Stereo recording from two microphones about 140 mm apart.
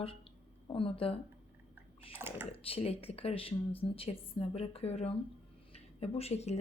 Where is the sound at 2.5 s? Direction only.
45° left (ahead or behind).